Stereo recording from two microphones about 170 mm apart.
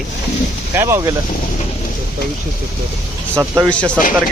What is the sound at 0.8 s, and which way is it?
Speech, 15° right (ahead or behind).